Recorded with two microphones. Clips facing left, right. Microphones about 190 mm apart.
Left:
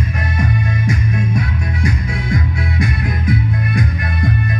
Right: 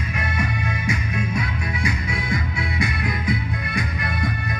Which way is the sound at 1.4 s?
50° left (ahead or behind).